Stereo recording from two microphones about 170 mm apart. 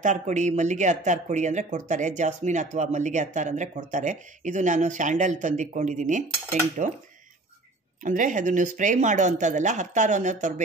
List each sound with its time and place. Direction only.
0.0 s speech: 45° right (ahead or behind)
8.0 s speech: 50° right (ahead or behind)